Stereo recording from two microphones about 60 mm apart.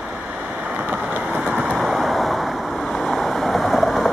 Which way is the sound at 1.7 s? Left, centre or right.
Centre.